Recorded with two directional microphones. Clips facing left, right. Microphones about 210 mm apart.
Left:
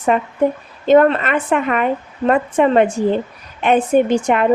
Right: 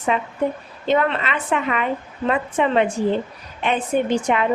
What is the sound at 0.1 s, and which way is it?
A woman's voice, 50° left (ahead or behind).